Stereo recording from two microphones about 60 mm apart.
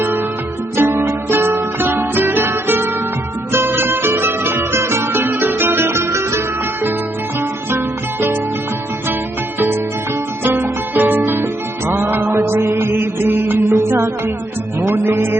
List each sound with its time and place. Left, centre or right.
0.0 s music: right
10.4 s music: right